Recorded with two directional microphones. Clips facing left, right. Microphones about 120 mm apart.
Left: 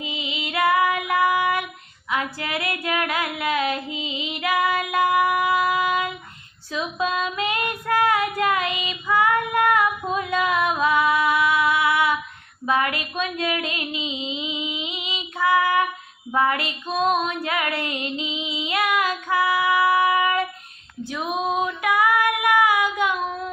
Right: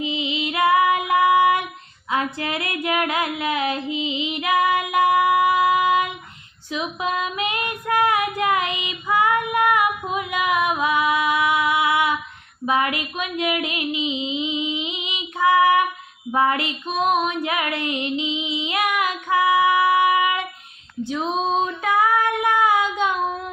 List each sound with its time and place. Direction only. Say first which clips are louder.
0.0 s child singing: right 6 dB; 25° right (ahead or behind)
6.7 s female singing: even; 20° right (ahead or behind)
12.6 s a sound: right 1 dB; 20° right (ahead or behind)
16.3 s child singing: right 2 dB; 20° right (ahead or behind)
21.0 s female singing: right 3 dB; 20° right (ahead or behind)
22.3 s child singing: even; 25° right (ahead or behind)